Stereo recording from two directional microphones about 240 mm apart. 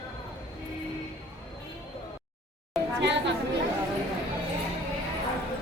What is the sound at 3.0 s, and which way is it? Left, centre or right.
Chatter, right.